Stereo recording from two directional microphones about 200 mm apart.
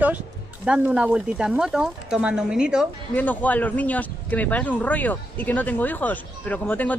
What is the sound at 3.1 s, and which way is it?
Speech, 10° left (ahead or behind).